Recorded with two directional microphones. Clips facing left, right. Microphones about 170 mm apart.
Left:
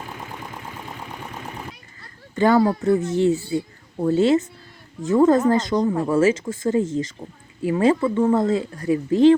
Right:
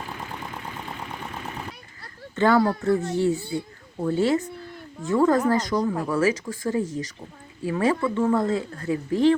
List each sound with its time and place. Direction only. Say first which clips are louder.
2.3 s speech: left 3 dB; 15° left (ahead or behind)